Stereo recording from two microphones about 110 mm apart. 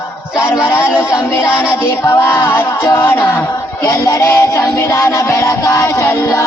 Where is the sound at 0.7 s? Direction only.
20° left (ahead or behind).